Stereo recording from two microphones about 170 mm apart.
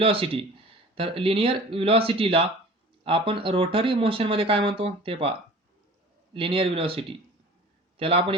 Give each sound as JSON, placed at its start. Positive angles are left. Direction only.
{"t": 0.0, "sound": "speech", "side_deg": -30}
{"t": 6.3, "sound": "speech", "side_deg": -30}